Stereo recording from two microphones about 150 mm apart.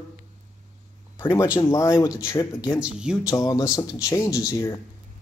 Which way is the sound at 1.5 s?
20° left (ahead or behind).